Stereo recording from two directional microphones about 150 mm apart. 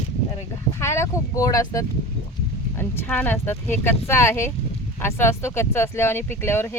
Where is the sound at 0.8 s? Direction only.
20° left (ahead or behind).